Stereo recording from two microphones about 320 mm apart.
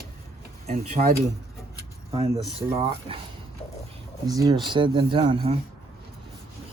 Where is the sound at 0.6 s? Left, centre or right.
Right.